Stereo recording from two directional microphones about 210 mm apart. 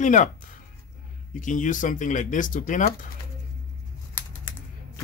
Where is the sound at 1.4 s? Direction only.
40° left (ahead or behind).